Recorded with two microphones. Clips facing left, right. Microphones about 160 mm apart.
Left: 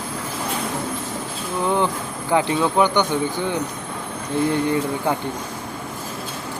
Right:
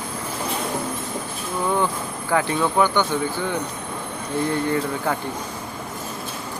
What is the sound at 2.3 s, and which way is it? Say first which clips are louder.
Speech: left 2 dB; 20° left (ahead or behind).